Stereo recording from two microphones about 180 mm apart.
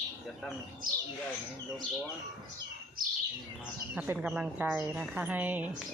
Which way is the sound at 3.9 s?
10° right (ahead or behind).